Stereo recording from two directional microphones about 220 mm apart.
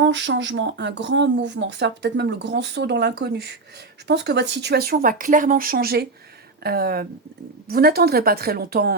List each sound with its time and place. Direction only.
0.0 s speech: 55° right (ahead or behind)